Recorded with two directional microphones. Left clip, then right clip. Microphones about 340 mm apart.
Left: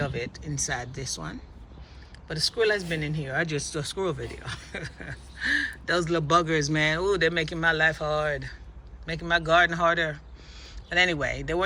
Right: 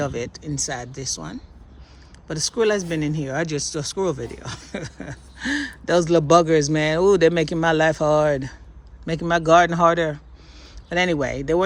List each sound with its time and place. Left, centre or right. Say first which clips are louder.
0.3 s speech: right 3 dB; centre